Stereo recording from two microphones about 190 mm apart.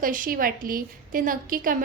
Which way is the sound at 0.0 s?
45° right (ahead or behind).